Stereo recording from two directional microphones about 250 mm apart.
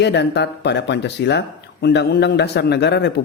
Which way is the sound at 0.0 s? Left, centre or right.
Left.